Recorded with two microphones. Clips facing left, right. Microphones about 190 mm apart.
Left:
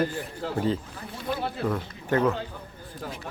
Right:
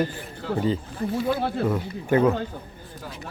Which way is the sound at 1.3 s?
55° right (ahead or behind).